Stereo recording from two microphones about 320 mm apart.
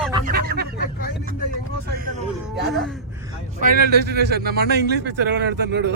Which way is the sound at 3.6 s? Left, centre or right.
Right.